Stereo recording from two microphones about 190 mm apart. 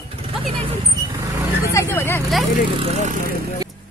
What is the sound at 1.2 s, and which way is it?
Vehicle, 15° right (ahead or behind).